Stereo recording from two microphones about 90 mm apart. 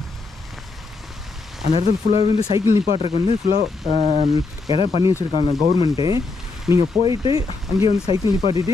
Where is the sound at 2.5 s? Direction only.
35° right (ahead or behind).